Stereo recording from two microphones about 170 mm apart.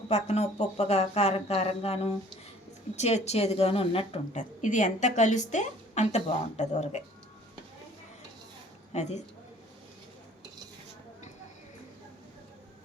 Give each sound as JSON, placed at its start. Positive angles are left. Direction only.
{"t": 0.1, "sound": "a woman's voice", "side_deg": 40}
{"t": 8.9, "sound": "a woman's voice", "side_deg": 40}